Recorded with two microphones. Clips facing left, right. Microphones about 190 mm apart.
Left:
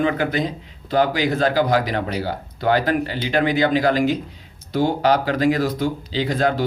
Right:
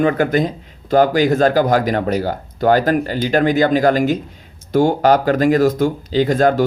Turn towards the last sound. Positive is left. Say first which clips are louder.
# right 6 dB
turn(degrees=-45)  # may be behind; listen again after turning